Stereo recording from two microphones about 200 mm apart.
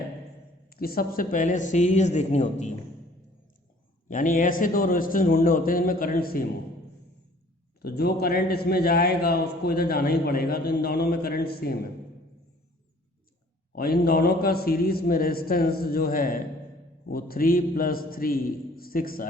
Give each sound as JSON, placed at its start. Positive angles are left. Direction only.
{"t": 0.7, "sound": "speech", "side_deg": 50}
{"t": 4.1, "sound": "a man's voice", "side_deg": 40}
{"t": 7.8, "sound": "a man's voice", "side_deg": 50}
{"t": 13.7, "sound": "a man's voice", "side_deg": 50}